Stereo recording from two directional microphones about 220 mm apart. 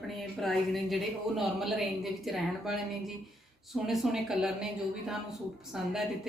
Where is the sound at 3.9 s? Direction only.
Centre (ahead or behind).